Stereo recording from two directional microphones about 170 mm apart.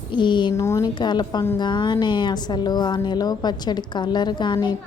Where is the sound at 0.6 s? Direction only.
15° left (ahead or behind).